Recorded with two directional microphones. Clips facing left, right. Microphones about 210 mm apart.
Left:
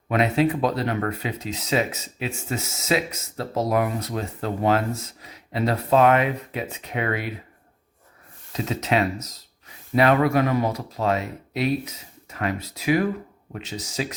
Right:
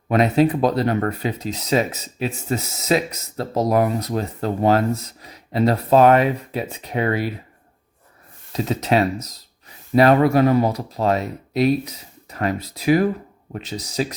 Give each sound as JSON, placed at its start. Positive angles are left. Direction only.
{"t": 0.1, "sound": "speech", "side_deg": -40}
{"t": 8.5, "sound": "speech", "side_deg": -35}